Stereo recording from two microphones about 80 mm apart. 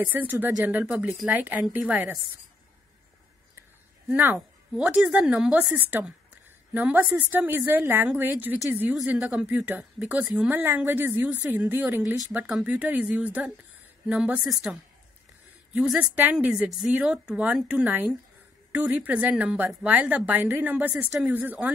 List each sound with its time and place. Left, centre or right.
0.0 s a woman's voice: right
4.1 s a woman's voice: right; by 14.8 s centre
16.0 s a woman's voice: centre